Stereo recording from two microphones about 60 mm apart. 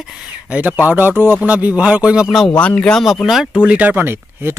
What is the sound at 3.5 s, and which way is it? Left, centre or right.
Speech, centre.